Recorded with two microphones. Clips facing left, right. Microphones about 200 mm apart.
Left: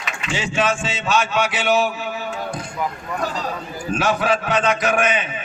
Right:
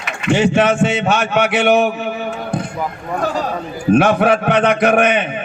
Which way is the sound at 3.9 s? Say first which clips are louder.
Right 8 dB; 60° right (ahead or behind).